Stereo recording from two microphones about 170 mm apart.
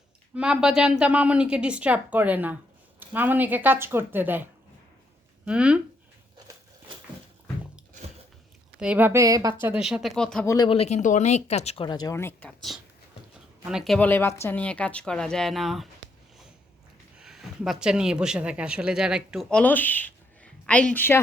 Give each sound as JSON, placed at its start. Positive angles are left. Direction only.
{"t": 0.3, "sound": "a woman's voice", "side_deg": -5}
{"t": 5.5, "sound": "a woman's voice", "side_deg": -5}
{"t": 8.8, "sound": "a woman's voice", "side_deg": -10}
{"t": 9.8, "sound": "speech", "side_deg": 0}
{"t": 10.4, "sound": "speech", "side_deg": 20}
{"t": 10.7, "sound": "speech", "side_deg": 40}
{"t": 11.9, "sound": "speech", "side_deg": 20}
{"t": 13.7, "sound": "speech", "side_deg": 0}
{"t": 17.2, "sound": "speech", "side_deg": -5}